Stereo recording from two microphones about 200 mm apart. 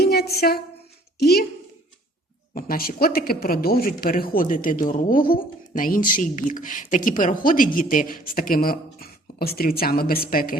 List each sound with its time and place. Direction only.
0.0 s a sound: 50° left (ahead or behind)
1.2 s speech: 50° left (ahead or behind)
2.6 s speech: 45° left (ahead or behind)